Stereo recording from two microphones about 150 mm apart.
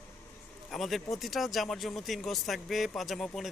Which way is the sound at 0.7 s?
Centre (ahead or behind).